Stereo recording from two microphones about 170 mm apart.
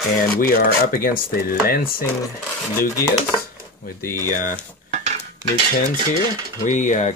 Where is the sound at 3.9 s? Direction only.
60° left (ahead or behind).